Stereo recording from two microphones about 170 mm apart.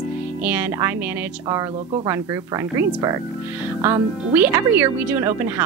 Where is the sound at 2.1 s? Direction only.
15° right (ahead or behind).